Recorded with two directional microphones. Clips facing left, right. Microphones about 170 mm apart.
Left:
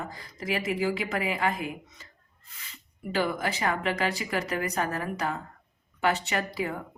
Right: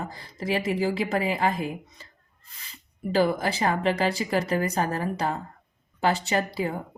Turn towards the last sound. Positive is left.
turn(degrees=-30)  # may be behind; listen again after turning